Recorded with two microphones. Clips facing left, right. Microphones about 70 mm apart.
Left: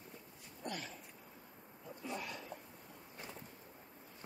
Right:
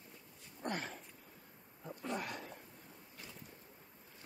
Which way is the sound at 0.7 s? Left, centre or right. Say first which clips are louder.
Right 4 dB; right.